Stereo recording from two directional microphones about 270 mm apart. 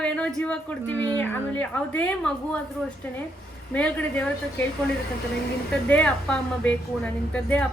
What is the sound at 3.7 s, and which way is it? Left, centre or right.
Speech, centre.